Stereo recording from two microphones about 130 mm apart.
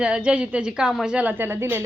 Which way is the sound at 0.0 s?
10° right (ahead or behind).